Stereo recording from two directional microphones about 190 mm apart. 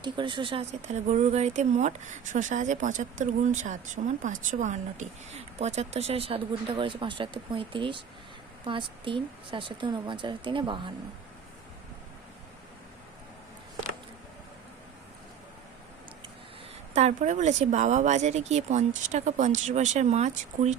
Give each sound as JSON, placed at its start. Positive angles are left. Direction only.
{"t": 0.0, "sound": "speech", "side_deg": -25}
{"t": 16.9, "sound": "speech", "side_deg": -35}